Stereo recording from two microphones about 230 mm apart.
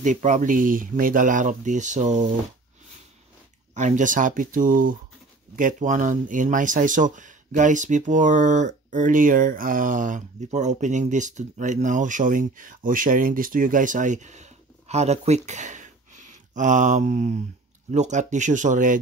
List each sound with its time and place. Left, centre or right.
0.0 s speech: right
3.7 s speech: right